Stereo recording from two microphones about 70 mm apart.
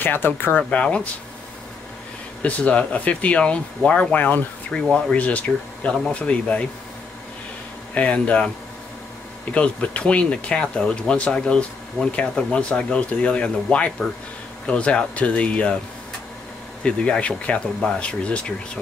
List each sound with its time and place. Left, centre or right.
0.0 s speech: left
0.6 s speech: centre
2.4 s speech: centre
4.7 s speech: centre
5.1 s speech: centre
7.9 s speech: centre
9.5 s speech: centre
16.8 s speech: centre